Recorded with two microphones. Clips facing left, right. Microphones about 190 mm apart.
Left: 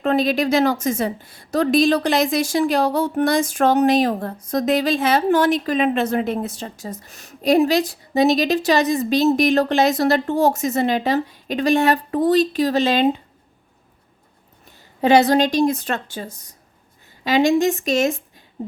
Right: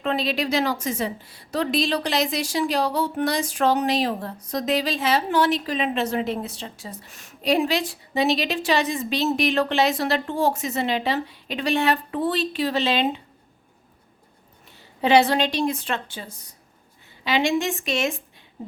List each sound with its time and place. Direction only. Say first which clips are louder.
0.0 s a woman's voice: left 6 dB; 45° left (ahead or behind)
15.0 s a woman's voice: left 4 dB; 40° left (ahead or behind)